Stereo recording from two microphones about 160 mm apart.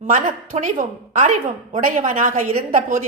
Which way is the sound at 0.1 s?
50° right (ahead or behind).